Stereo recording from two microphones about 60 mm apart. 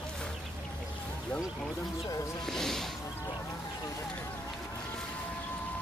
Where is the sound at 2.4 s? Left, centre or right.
Centre.